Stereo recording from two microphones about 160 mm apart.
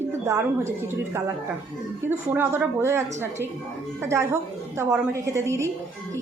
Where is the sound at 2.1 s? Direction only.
10° right (ahead or behind).